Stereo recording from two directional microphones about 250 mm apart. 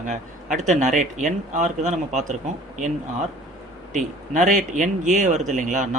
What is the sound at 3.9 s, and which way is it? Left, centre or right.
A man's voice, right.